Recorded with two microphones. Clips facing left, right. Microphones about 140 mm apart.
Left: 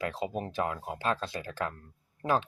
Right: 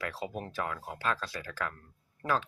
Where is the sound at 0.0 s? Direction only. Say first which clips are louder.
Left 4 dB; 20° left (ahead or behind).